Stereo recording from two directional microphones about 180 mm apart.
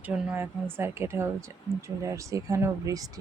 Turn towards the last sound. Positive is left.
turn(degrees=-20)  # may be behind; listen again after turning